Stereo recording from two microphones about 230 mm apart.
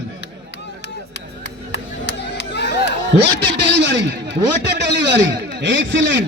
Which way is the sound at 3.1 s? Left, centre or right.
Right.